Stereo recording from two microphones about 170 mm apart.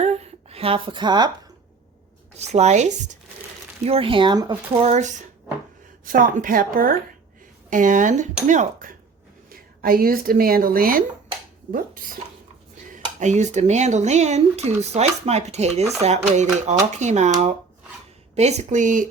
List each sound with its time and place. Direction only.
0.0 s a sound: 40° right (ahead or behind)
2.3 s speech: 40° right (ahead or behind)
3.8 s speech: 35° right (ahead or behind)
4.8 s a woman's voice: 45° right (ahead or behind); by 11.0 s 60° right (ahead or behind)
12.9 s speech: 45° right (ahead or behind)